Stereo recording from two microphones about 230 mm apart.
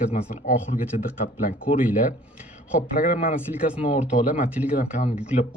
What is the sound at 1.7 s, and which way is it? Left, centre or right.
Speech, left.